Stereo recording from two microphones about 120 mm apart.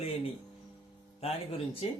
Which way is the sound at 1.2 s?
55° left (ahead or behind).